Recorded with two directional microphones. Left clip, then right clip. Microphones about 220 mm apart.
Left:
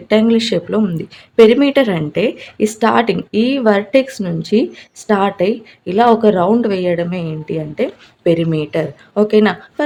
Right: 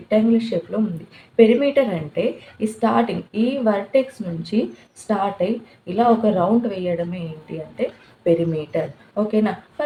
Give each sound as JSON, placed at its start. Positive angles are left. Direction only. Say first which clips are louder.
{"t": 0.1, "sound": "speech", "louder": "left 6 dB", "side_deg": 50}